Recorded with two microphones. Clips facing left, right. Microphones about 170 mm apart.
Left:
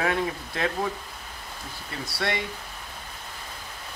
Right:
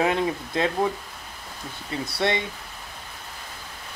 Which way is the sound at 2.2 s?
20° right (ahead or behind).